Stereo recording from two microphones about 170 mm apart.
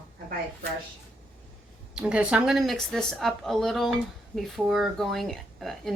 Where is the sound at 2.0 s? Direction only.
5° right (ahead or behind).